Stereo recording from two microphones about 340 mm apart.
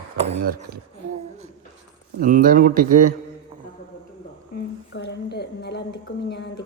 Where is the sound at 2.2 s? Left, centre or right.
Right.